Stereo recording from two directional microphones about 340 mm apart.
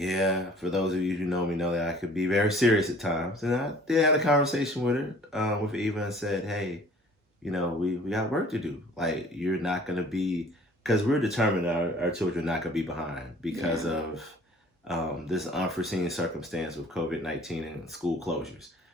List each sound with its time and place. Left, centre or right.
0.0 s speech: centre
12.5 s speech: centre